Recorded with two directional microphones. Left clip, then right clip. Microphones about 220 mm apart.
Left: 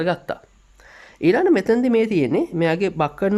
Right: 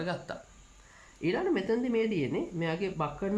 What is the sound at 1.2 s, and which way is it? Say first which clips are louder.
Speech: left 13 dB; 50° left (ahead or behind).